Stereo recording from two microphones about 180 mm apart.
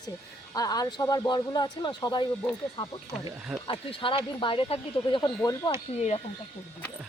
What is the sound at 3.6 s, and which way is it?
Speech, 30° left (ahead or behind).